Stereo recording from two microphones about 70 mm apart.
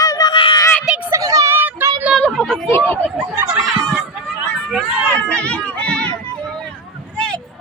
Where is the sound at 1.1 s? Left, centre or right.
Right.